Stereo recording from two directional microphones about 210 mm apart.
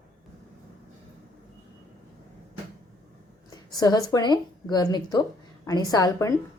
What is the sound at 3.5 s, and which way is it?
A woman's voice, 20° left (ahead or behind).